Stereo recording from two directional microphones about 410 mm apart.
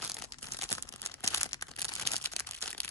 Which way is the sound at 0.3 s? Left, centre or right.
Centre.